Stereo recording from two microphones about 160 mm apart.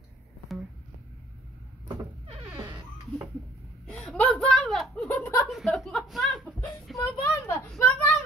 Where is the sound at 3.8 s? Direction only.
5° left (ahead or behind).